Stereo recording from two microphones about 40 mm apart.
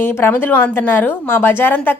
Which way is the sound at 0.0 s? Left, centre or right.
Left.